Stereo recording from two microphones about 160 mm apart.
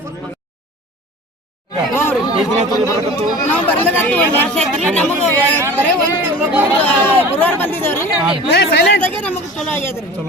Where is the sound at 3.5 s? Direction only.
10° left (ahead or behind).